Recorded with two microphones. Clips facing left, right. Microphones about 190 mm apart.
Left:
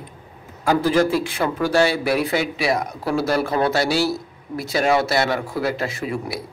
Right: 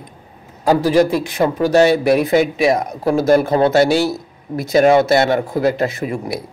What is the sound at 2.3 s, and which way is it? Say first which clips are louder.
Speech: right 7 dB; 45° right (ahead or behind).